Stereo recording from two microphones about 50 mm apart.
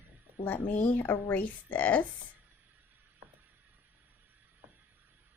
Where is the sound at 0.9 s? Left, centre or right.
Left.